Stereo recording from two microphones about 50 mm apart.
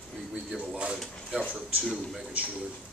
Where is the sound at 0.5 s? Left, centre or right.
Centre.